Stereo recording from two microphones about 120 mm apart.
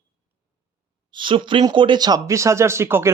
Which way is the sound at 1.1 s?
45° right (ahead or behind).